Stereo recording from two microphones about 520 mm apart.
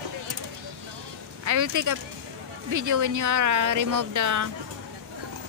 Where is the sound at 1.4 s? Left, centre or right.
Right.